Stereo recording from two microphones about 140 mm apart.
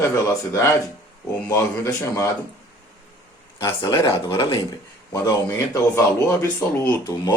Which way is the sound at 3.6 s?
25° left (ahead or behind).